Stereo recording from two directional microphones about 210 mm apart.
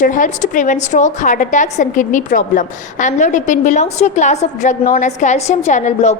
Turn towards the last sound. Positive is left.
turn(degrees=35)  # may be behind; listen again after turning